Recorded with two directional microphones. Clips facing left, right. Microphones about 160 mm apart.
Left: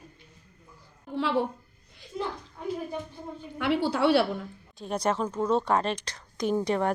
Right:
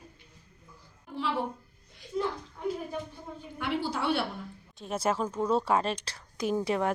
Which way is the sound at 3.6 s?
65° left (ahead or behind).